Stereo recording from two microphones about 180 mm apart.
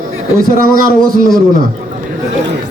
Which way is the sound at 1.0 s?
Centre (ahead or behind).